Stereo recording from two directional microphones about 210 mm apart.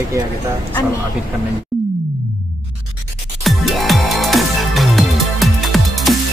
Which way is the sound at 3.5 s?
Centre (ahead or behind).